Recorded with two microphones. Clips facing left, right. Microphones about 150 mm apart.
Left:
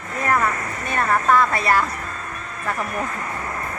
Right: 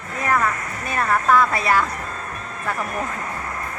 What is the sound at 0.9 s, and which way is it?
Speech, centre (ahead or behind).